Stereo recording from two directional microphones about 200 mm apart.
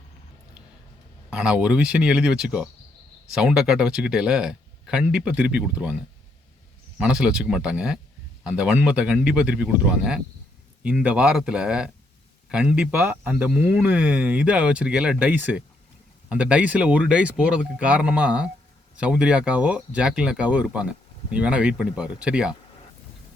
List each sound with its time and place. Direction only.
1.3 s speech: 5° right (ahead or behind)
7.0 s speech: 5° right (ahead or behind)